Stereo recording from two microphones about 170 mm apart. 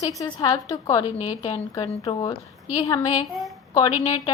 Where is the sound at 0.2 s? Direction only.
25° left (ahead or behind).